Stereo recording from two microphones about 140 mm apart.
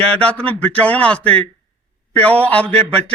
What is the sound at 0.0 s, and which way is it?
Speech, 10° left (ahead or behind).